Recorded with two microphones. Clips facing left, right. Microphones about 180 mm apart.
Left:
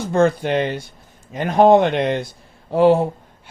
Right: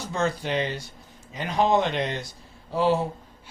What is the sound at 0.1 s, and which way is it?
Speech, 55° left (ahead or behind).